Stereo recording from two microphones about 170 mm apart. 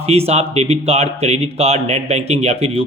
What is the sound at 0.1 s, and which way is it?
A man's voice, 35° right (ahead or behind).